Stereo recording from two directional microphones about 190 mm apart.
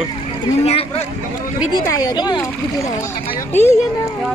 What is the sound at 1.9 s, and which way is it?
Speech, 20° left (ahead or behind).